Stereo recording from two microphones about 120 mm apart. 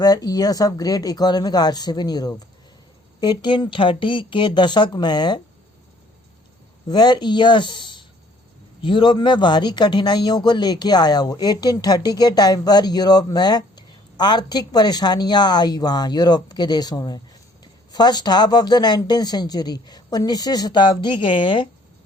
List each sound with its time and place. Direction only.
0.0 s speech: 30° left (ahead or behind)
6.8 s speech: 35° left (ahead or behind)